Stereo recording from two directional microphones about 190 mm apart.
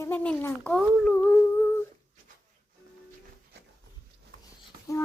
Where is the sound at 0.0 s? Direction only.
10° left (ahead or behind).